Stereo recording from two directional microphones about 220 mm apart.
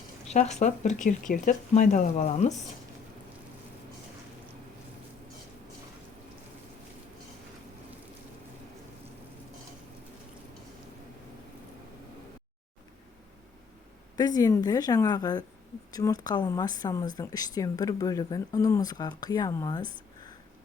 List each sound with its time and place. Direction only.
0.3 s speech: 30° left (ahead or behind)
14.2 s speech: 15° left (ahead or behind)